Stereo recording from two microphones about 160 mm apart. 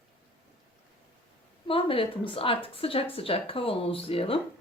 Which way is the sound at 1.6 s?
35° left (ahead or behind).